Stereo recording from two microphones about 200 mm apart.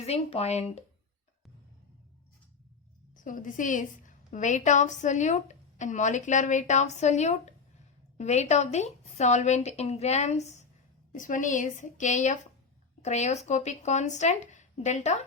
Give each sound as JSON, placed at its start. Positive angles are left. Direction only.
{"t": 0.0, "sound": "a woman's voice", "side_deg": 30}
{"t": 3.2, "sound": "a woman's voice", "side_deg": 40}